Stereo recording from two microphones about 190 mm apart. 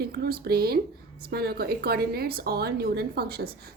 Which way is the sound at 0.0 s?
55° right (ahead or behind).